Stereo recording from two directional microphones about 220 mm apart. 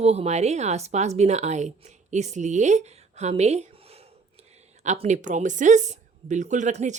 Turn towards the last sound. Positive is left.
turn(degrees=-30)  # may be behind; listen again after turning